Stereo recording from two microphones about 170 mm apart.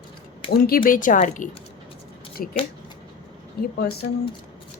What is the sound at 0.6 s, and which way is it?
A woman's voice, 60° left (ahead or behind).